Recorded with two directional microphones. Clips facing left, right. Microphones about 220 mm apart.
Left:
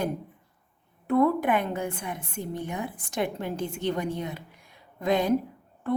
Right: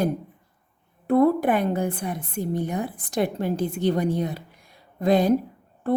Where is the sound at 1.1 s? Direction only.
35° right (ahead or behind).